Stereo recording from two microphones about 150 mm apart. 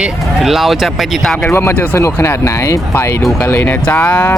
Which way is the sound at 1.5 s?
15° left (ahead or behind).